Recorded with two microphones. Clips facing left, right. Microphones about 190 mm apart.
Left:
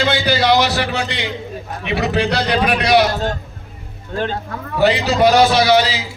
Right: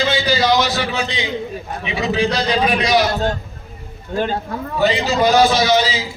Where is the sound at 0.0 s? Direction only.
65° left (ahead or behind).